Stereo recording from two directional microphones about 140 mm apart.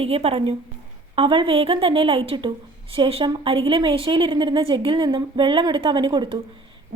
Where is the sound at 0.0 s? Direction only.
45° right (ahead or behind).